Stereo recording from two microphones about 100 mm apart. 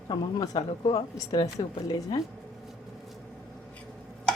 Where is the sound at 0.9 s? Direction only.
35° left (ahead or behind).